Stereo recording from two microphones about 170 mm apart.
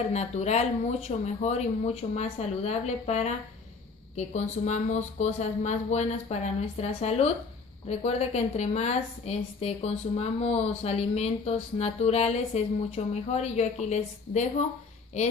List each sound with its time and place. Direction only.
0.1 s a woman's voice: 40° left (ahead or behind)